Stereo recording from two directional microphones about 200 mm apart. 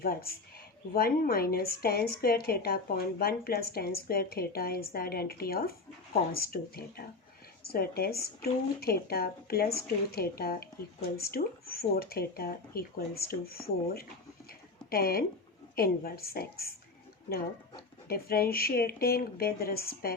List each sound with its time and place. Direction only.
0.0 s a woman's voice: 45° left (ahead or behind)
18.1 s a woman's voice: 50° left (ahead or behind)